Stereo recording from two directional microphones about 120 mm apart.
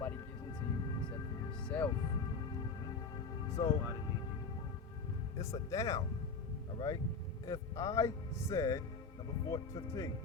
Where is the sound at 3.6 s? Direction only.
35° left (ahead or behind).